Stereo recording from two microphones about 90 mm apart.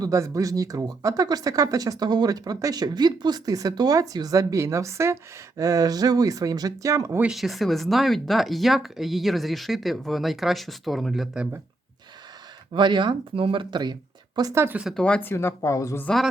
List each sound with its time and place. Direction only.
0.0 s speech: 40° right (ahead or behind)
7.3 s speech: centre (ahead or behind)
12.7 s speech: 60° right (ahead or behind)
14.5 s speech: 30° right (ahead or behind)
14.9 s speech: 15° left (ahead or behind)
15.3 s speech: 25° left (ahead or behind)